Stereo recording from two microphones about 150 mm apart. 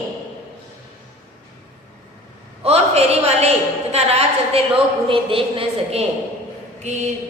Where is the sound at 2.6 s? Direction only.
45° right (ahead or behind).